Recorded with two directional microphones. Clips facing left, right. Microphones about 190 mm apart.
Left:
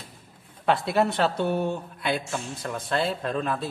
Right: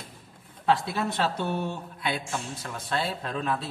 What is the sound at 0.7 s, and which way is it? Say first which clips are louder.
A man's voice: left 3 dB; 60° left (ahead or behind).